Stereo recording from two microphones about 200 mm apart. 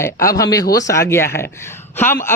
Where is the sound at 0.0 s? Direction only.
15° left (ahead or behind).